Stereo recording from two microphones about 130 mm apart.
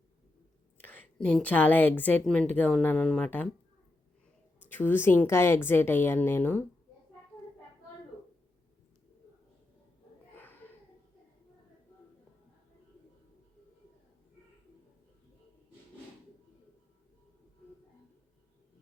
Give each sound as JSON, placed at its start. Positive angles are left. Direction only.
{"t": 0.8, "sound": "a woman's voice", "side_deg": 10}
{"t": 4.7, "sound": "a woman's voice", "side_deg": 15}
{"t": 10.3, "sound": "a sound", "side_deg": 15}